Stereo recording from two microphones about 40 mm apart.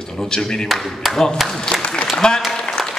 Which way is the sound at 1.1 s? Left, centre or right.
Centre.